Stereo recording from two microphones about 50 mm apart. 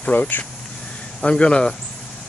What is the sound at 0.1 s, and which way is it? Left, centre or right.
Speech, left.